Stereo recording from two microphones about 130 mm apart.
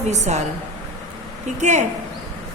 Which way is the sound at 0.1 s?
65° right (ahead or behind).